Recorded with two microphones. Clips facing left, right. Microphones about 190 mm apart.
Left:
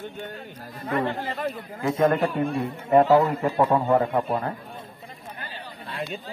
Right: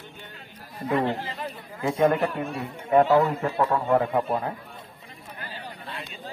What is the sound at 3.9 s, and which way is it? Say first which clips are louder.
Speech: left 1 dB; centre (ahead or behind).